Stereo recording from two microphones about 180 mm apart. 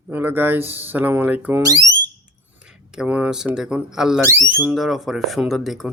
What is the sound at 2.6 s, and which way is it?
Speech, 5° right (ahead or behind).